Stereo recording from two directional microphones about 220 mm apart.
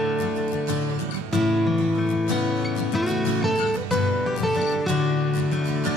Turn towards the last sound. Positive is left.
turn(degrees=0)  # may be behind; listen again after turning